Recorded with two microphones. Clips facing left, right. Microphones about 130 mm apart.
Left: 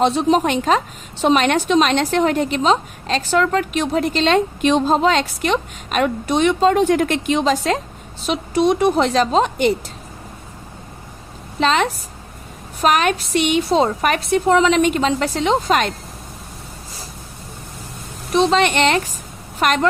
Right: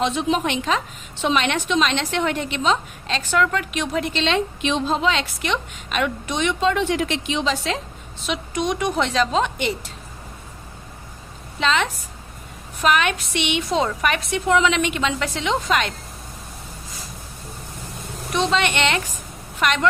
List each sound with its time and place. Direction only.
0.0 s a woman's voice: 35° left (ahead or behind)
11.6 s a woman's voice: 40° left (ahead or behind)
18.3 s a woman's voice: 40° left (ahead or behind)